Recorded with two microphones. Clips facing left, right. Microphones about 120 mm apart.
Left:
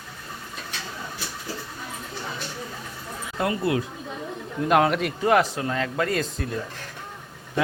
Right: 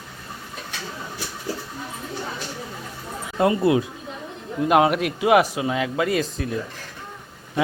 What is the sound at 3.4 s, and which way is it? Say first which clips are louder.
Speech: right 6 dB; 25° right (ahead or behind).